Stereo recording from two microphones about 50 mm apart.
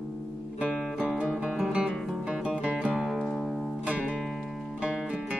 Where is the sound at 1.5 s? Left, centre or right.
Centre.